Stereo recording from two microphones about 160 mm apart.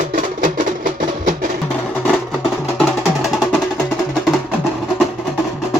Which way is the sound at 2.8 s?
Centre (ahead or behind).